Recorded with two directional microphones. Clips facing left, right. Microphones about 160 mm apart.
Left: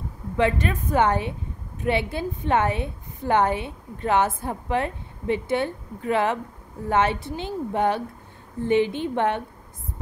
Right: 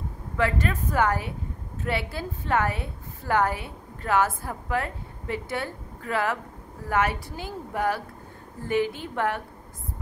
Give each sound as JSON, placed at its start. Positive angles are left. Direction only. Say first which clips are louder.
{"t": 0.4, "sound": "a woman's voice", "louder": "left 3 dB", "side_deg": 20}